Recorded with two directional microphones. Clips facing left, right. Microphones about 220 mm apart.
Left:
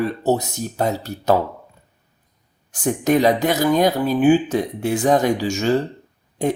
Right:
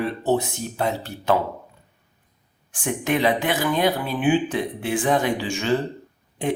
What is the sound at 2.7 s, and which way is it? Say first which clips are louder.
Speech: left 6 dB; 40° left (ahead or behind).